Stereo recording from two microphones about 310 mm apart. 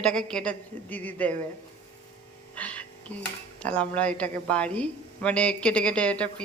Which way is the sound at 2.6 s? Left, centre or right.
Centre.